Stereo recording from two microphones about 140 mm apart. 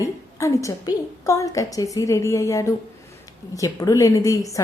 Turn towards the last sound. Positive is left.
turn(degrees=25)  # may be behind; listen again after turning